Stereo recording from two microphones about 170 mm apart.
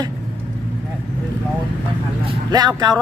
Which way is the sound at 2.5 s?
25° right (ahead or behind).